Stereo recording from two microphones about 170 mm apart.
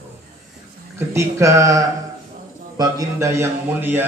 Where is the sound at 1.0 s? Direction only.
15° right (ahead or behind).